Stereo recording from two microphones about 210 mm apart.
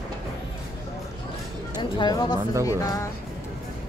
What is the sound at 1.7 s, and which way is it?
Speech, 20° left (ahead or behind).